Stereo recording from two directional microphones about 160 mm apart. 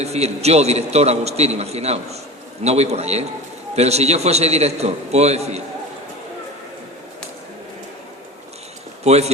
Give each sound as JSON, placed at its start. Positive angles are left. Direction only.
{"t": 0.0, "sound": "a man's voice", "side_deg": -40}
{"t": 9.0, "sound": "a man's voice", "side_deg": -40}